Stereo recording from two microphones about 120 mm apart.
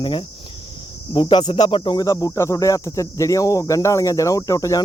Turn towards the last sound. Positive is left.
turn(degrees=30)  # may be behind; listen again after turning